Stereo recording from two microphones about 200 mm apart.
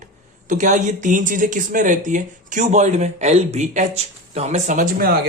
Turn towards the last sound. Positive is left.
turn(degrees=-40)  # may be behind; listen again after turning